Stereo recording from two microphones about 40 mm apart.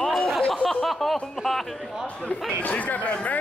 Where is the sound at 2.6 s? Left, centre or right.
Left.